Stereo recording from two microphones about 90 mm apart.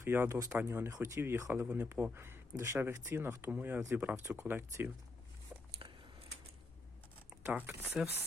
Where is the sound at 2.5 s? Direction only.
30° right (ahead or behind).